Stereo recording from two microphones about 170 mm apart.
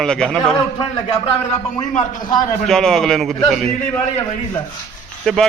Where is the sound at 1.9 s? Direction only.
45° left (ahead or behind).